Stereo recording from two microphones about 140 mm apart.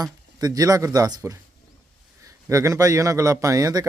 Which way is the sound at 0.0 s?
25° right (ahead or behind).